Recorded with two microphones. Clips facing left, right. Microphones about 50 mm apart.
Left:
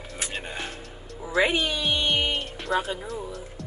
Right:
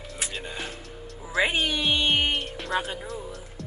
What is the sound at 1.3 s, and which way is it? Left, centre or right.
Speech, centre.